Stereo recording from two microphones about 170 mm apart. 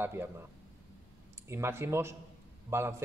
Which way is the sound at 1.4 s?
15° right (ahead or behind).